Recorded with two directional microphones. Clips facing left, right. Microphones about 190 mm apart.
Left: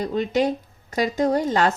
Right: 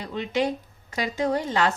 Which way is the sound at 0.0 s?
40° left (ahead or behind).